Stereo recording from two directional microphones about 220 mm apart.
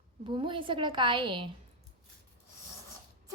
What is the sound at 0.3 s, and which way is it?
A woman's voice, 20° right (ahead or behind).